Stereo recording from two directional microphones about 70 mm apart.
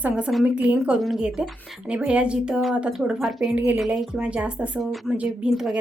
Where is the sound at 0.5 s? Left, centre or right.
Centre.